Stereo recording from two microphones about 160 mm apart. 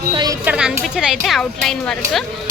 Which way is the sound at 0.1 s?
25° right (ahead or behind).